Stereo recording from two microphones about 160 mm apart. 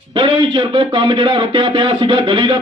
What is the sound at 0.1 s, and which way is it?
A man's voice, 30° right (ahead or behind).